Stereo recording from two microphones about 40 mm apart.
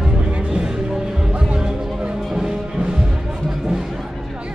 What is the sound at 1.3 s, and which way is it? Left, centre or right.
Music, right.